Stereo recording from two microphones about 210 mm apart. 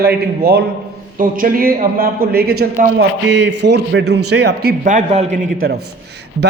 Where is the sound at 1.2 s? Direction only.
40° right (ahead or behind).